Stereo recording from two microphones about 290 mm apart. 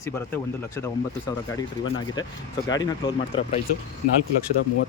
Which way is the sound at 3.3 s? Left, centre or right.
Centre.